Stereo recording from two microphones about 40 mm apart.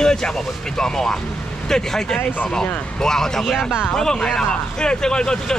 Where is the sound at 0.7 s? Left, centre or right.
Centre.